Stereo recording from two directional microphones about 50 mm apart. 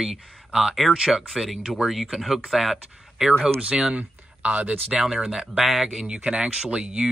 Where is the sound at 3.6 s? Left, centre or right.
Centre.